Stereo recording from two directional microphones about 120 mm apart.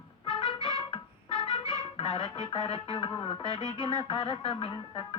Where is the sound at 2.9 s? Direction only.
45° left (ahead or behind).